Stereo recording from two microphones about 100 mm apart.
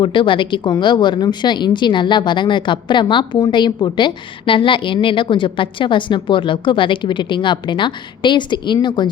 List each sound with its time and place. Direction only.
0.0 s a woman's voice: 55° left (ahead or behind)